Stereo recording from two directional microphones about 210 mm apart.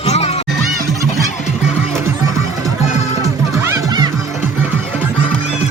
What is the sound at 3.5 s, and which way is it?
Music, 15° right (ahead or behind).